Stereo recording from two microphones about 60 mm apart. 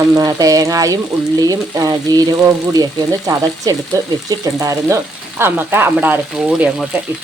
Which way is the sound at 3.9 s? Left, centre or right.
Right.